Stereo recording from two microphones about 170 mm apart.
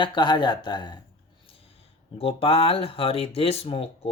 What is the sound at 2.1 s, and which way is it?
Speech, 35° left (ahead or behind).